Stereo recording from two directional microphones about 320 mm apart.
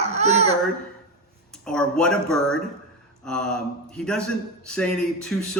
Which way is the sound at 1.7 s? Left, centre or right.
Centre.